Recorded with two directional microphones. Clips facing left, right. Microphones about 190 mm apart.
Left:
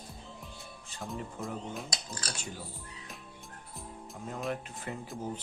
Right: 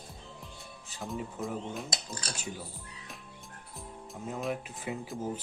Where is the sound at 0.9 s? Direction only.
Centre (ahead or behind).